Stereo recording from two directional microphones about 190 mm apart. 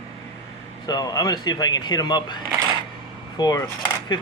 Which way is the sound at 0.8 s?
20° left (ahead or behind).